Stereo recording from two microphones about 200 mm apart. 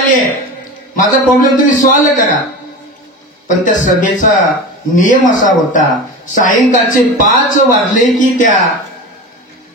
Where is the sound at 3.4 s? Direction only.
40° left (ahead or behind).